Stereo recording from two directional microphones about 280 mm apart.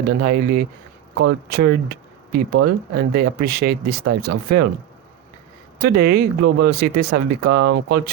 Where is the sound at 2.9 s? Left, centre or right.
Right.